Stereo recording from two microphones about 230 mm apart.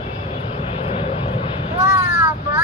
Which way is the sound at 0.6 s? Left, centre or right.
Left.